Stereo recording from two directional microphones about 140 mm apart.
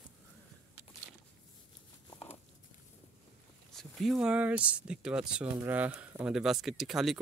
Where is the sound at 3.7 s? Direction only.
Centre (ahead or behind).